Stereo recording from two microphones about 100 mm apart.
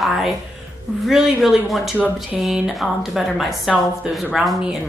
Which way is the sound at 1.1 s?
Centre (ahead or behind).